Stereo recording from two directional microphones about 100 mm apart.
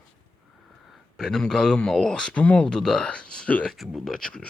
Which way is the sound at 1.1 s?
5° left (ahead or behind).